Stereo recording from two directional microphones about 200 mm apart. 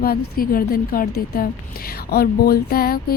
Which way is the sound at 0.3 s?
45° left (ahead or behind).